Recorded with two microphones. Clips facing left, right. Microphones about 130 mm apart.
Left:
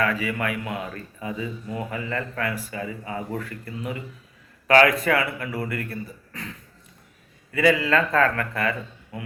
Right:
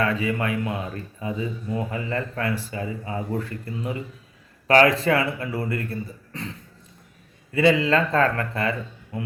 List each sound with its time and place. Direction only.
0.0 s a man's voice: 25° right (ahead or behind)
7.5 s a man's voice: 25° right (ahead or behind)